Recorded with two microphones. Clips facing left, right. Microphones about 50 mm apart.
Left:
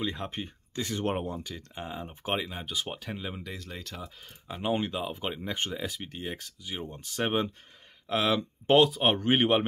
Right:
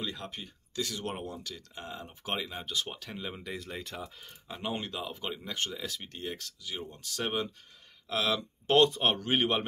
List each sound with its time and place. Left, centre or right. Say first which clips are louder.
0.0 s speech: left 5 dB; left; by 3.5 s centre
3.5 s speech: right 1 dB; centre; by 8.7 s left
8.7 s speech: left 2 dB; centre
9.0 s speech: left 4 dB; left